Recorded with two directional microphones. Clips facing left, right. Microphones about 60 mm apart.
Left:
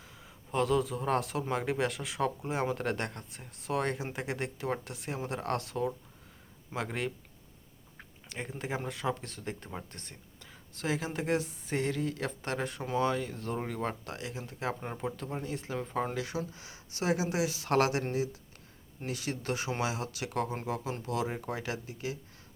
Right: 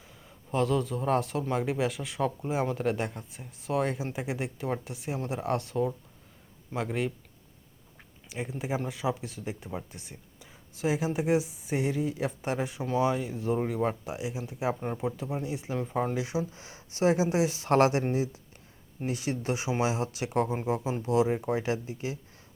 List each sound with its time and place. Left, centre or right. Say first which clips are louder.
0.0 s a man's voice: even; centre
8.3 s speech: right 4 dB; centre
14.8 s a man's voice: right 5 dB; centre
16.1 s speech: right 4 dB; centre
16.6 s speech: right 8 dB; right